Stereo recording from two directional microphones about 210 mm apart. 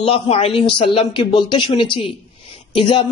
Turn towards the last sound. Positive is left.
turn(degrees=25)  # may be behind; listen again after turning